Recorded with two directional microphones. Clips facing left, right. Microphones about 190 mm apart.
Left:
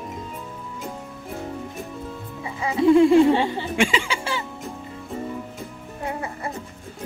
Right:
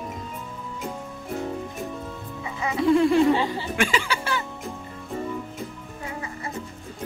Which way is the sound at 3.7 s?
25° left (ahead or behind).